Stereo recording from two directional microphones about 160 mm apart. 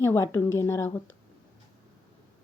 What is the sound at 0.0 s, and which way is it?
A woman's voice, 20° left (ahead or behind).